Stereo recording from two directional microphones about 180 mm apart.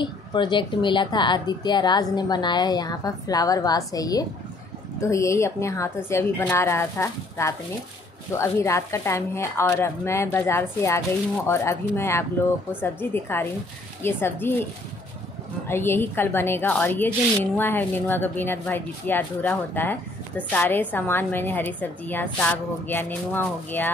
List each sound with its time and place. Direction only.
0.0 s a woman's voice: 25° left (ahead or behind)
15.7 s a woman's voice: 15° left (ahead or behind)